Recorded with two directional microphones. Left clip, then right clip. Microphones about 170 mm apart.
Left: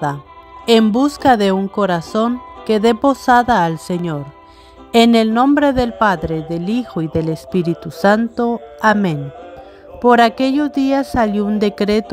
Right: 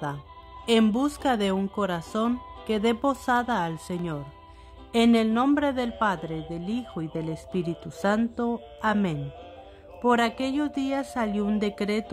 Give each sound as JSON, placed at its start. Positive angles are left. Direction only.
{"t": 0.8, "sound": "speech", "side_deg": 30}